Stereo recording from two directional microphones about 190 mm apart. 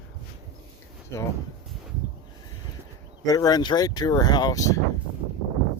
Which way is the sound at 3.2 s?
20° left (ahead or behind).